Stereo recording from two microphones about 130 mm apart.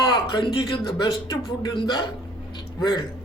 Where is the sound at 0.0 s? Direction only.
40° left (ahead or behind).